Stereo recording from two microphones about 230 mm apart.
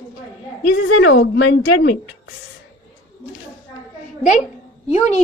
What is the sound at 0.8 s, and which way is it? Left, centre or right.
A woman's voice, left.